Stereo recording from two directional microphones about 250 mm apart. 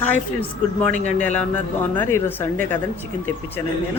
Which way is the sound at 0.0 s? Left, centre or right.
Centre.